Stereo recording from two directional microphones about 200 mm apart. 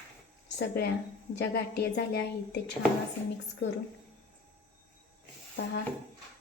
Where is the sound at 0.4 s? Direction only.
55° left (ahead or behind).